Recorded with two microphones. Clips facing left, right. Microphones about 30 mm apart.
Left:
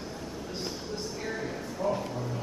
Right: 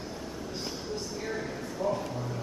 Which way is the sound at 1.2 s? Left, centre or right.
Centre.